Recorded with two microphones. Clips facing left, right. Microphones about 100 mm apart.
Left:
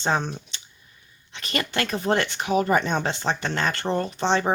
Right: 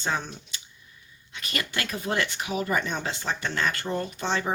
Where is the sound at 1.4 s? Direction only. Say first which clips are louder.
Left 5 dB; 45° left (ahead or behind).